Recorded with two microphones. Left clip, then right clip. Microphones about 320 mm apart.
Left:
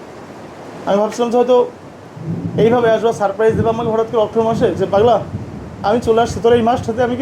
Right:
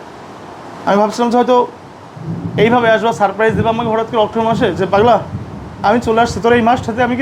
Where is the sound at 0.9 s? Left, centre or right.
Right.